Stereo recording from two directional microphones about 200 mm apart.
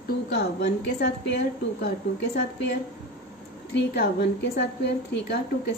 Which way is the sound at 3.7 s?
55° left (ahead or behind).